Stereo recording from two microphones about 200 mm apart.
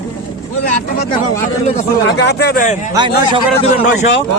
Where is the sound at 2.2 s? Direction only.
55° left (ahead or behind).